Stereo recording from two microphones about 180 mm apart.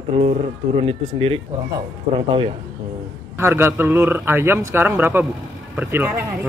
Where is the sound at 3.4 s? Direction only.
15° right (ahead or behind).